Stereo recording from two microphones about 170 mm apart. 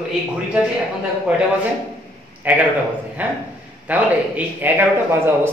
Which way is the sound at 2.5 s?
10° right (ahead or behind).